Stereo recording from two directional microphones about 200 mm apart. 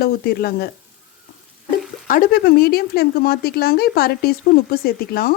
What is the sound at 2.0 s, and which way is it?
Speech, 45° left (ahead or behind).